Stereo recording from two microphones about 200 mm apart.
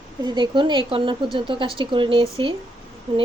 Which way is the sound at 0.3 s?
25° right (ahead or behind).